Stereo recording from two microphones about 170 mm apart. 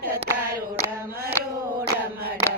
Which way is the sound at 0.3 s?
15° right (ahead or behind).